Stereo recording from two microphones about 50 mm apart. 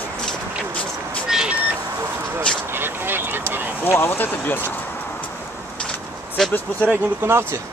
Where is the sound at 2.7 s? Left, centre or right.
Right.